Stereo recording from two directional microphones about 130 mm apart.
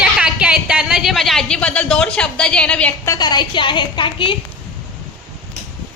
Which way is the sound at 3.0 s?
30° left (ahead or behind).